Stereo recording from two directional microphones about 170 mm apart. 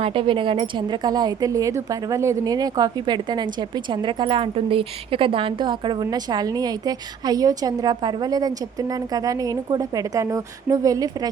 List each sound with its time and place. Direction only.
0.0 s speech: 30° right (ahead or behind)